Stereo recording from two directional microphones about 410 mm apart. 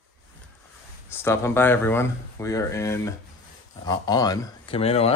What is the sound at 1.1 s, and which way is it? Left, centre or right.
Speech, centre.